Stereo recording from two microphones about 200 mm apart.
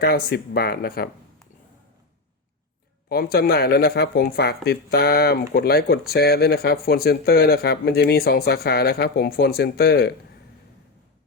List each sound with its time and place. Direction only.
0.0 s speech: 50° left (ahead or behind)
3.1 s speech: 50° left (ahead or behind)